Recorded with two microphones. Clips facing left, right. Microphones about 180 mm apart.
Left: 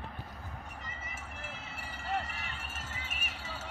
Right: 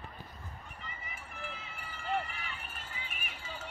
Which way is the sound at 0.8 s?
45° left (ahead or behind).